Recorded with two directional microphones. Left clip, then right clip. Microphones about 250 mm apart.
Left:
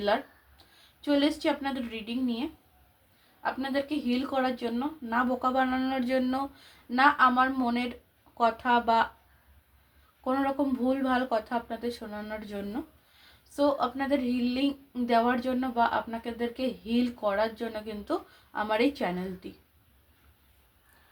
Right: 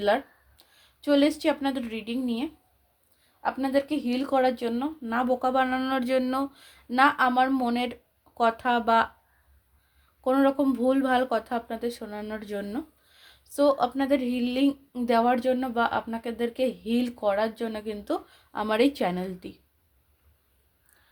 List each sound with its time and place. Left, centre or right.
0.0 s a sound: right
1.0 s a woman's voice: right
10.2 s a woman's voice: right